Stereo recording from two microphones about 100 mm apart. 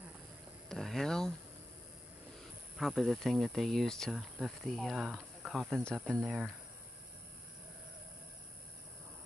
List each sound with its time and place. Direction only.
0.7 s speech: 5° left (ahead or behind)
2.8 s speech: centre (ahead or behind)